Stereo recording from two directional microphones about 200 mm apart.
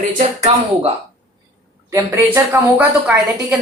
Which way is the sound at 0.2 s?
30° right (ahead or behind).